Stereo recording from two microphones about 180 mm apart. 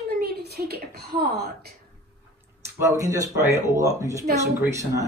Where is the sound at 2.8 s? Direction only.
15° right (ahead or behind).